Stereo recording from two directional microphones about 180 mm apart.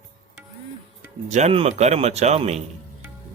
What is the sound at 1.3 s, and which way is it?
A man's voice, 35° right (ahead or behind).